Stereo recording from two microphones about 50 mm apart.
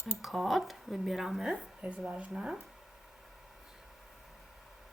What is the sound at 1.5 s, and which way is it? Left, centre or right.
Speech, right.